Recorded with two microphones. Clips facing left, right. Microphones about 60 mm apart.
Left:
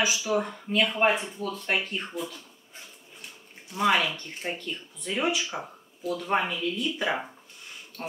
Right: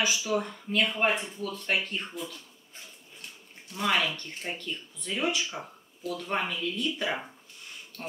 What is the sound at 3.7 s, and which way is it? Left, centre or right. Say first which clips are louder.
Speech: left 4 dB; centre.